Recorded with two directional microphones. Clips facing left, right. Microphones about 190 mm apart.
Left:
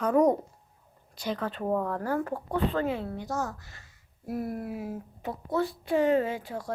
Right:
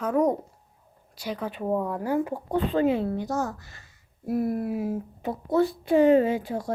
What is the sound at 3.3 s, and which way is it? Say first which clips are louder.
Speech: right 4 dB; 35° right (ahead or behind).